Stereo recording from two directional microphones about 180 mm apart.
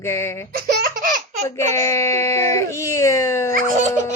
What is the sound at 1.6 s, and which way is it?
Speech, 15° left (ahead or behind).